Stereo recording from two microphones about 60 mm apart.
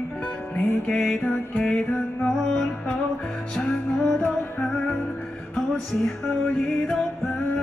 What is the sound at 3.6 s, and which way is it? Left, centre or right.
Music, left.